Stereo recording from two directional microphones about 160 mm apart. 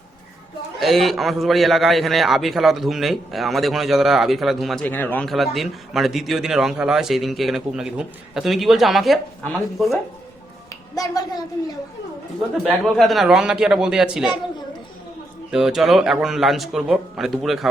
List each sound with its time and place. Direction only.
0.8 s a man's voice: centre (ahead or behind)
10.7 s a sound: 20° left (ahead or behind)
12.6 s a man's voice: centre (ahead or behind)
15.5 s a man's voice: centre (ahead or behind)